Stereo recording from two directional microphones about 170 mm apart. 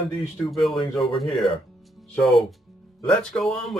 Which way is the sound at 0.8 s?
30° left (ahead or behind).